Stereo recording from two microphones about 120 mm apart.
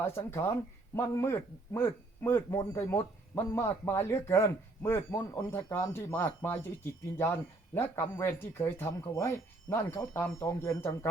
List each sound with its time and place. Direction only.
0.0 s speech: 20° left (ahead or behind)